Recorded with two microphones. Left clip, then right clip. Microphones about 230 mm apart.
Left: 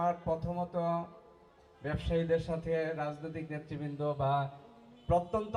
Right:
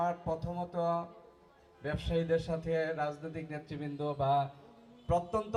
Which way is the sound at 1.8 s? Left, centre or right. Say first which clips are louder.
Even; right.